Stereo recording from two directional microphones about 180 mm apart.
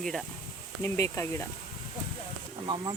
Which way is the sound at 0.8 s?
15° left (ahead or behind).